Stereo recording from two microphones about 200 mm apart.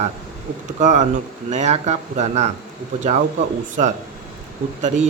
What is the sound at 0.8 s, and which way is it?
Speech, 40° right (ahead or behind).